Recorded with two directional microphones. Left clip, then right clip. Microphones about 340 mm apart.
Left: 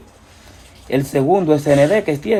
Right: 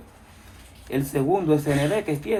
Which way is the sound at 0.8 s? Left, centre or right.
Left.